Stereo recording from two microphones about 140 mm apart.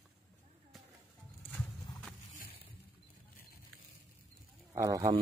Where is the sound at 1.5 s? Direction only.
5° left (ahead or behind).